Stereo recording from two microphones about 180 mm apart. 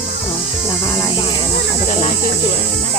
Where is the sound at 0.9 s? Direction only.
15° left (ahead or behind).